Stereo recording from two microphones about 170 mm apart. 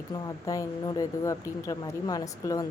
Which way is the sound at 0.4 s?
20° left (ahead or behind).